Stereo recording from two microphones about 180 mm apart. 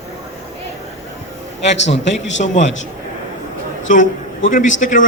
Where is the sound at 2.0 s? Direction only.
90° left.